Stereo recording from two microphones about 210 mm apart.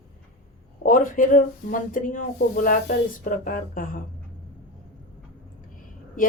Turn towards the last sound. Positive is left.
turn(degrees=40)  # may be behind; listen again after turning